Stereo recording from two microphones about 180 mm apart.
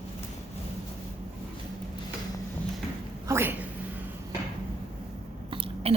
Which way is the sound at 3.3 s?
10° right (ahead or behind).